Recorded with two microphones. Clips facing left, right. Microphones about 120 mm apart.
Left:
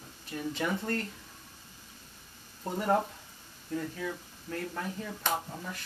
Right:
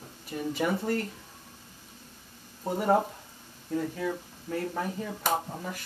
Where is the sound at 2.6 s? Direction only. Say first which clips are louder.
Right 3 dB; 15° right (ahead or behind).